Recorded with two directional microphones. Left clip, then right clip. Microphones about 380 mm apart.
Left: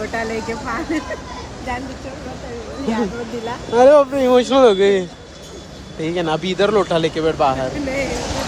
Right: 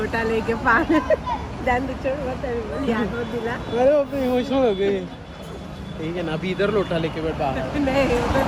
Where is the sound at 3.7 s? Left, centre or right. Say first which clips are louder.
Left 8 dB; centre.